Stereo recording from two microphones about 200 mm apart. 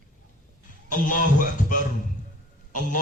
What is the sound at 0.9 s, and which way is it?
A man's voice, 40° left (ahead or behind).